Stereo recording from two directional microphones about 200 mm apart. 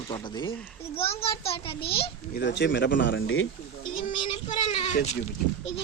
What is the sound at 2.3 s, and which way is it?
Speech, 60° left (ahead or behind).